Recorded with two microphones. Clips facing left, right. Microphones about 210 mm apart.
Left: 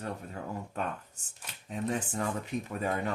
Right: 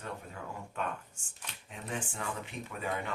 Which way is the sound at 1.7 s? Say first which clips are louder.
Left 7 dB; 40° left (ahead or behind).